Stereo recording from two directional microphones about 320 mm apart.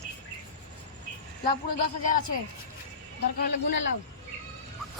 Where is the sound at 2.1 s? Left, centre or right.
Left.